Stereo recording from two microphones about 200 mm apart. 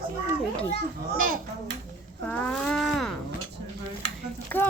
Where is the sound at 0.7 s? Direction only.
45° right (ahead or behind).